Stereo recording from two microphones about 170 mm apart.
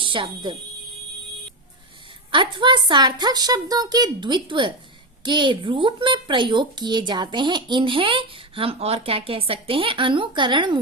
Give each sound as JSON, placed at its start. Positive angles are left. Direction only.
{"t": 0.0, "sound": "speech", "side_deg": -30}
{"t": 2.3, "sound": "a woman's voice", "side_deg": -30}